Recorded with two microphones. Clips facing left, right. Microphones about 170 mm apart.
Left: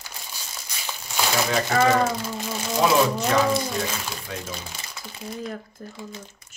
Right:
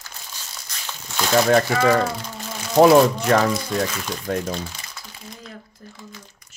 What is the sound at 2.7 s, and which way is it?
Speech, 55° right (ahead or behind).